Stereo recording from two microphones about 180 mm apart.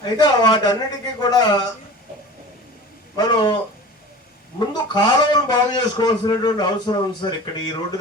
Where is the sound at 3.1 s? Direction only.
25° left (ahead or behind).